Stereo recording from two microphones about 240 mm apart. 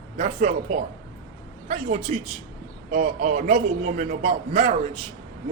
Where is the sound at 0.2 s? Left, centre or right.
Right.